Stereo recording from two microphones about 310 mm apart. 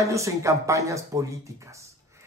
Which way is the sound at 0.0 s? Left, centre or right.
Centre.